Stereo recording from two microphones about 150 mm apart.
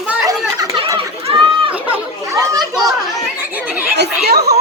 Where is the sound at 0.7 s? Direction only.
35° right (ahead or behind).